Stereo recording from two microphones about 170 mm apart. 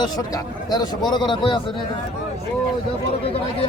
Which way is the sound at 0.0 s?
25° left (ahead or behind).